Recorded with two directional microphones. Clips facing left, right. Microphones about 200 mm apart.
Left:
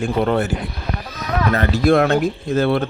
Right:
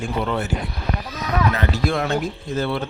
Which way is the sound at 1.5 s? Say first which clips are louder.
Left 7 dB; 55° left (ahead or behind).